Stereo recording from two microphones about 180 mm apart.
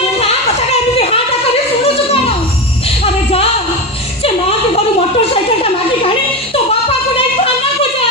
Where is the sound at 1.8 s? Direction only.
35° left (ahead or behind).